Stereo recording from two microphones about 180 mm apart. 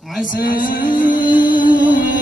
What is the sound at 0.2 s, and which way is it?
Music, 50° left (ahead or behind).